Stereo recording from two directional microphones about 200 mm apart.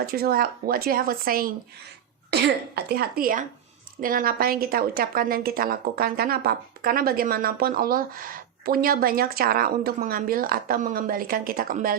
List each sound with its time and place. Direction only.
0.0 s a woman's voice: 50° right (ahead or behind)